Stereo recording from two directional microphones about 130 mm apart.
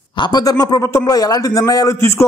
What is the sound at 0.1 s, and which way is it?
A man's voice, 35° left (ahead or behind).